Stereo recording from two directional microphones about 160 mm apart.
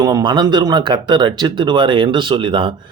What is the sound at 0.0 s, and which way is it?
Speech, 25° right (ahead or behind).